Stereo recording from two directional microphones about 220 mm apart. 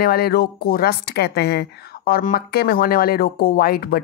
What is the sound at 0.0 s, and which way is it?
Speech, 45° left (ahead or behind).